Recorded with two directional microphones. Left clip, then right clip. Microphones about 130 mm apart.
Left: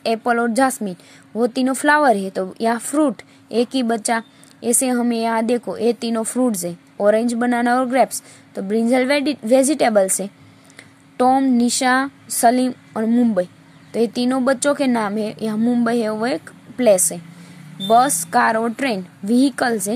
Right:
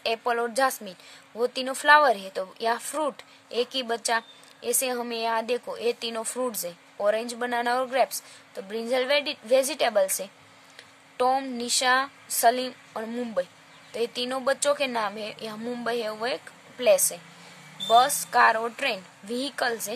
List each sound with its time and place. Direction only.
0.0 s a woman's voice: 30° left (ahead or behind)